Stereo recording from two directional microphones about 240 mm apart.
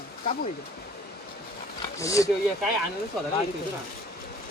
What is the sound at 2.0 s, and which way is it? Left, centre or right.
Speech, centre.